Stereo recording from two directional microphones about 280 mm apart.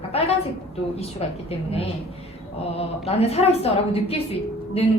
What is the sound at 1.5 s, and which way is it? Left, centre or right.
Speech, left.